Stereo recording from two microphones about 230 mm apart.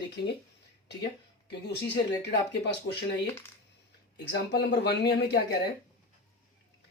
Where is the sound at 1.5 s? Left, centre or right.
Left.